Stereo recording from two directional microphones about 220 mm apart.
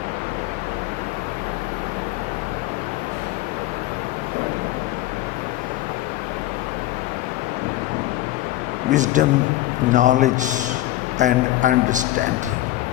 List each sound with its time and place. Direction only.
8.9 s a man's voice: 35° right (ahead or behind)